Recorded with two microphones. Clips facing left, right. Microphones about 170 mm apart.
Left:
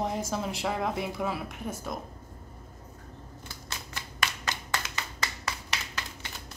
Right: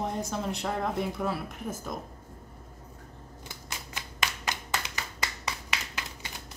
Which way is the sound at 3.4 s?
20° right (ahead or behind).